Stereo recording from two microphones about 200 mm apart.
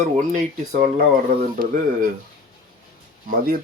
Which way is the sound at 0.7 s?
45° right (ahead or behind).